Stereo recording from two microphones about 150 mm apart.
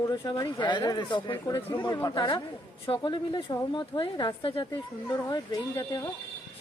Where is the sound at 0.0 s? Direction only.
25° left (ahead or behind).